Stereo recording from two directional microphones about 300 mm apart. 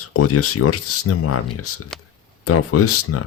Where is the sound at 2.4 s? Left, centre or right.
Left.